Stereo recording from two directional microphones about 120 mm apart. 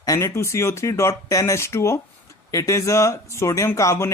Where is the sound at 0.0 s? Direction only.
25° left (ahead or behind).